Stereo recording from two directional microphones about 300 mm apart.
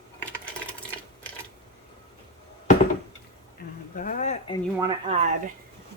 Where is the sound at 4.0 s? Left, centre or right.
Left.